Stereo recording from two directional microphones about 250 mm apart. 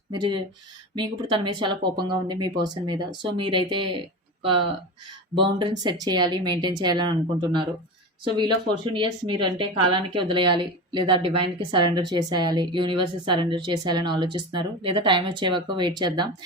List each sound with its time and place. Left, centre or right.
0.1 s speech: centre